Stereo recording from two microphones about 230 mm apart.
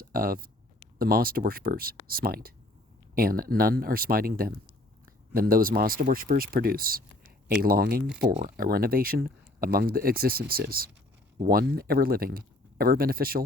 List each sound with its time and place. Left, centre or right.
0.0 s speech: right